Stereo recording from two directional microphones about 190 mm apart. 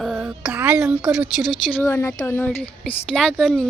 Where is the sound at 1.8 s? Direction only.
15° left (ahead or behind).